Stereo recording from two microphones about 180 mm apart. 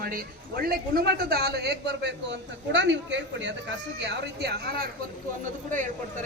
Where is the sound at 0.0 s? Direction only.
55° right (ahead or behind); by 3.5 s 85° right.